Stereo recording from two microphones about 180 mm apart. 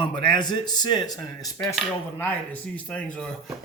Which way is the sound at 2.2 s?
10° left (ahead or behind).